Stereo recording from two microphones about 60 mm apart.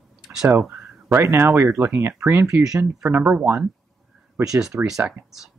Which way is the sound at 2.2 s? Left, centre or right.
Right.